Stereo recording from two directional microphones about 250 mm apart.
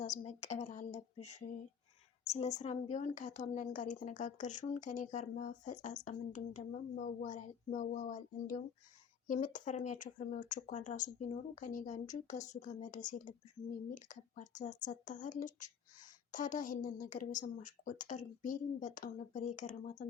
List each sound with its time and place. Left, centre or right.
0.0 s a woman's voice: left